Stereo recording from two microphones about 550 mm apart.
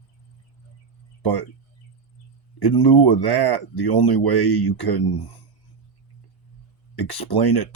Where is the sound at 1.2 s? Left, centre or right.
Left.